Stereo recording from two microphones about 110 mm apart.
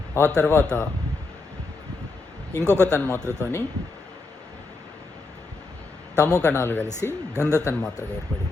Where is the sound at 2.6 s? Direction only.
20° right (ahead or behind).